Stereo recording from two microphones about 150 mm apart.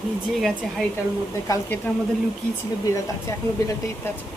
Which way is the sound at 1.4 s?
20° left (ahead or behind).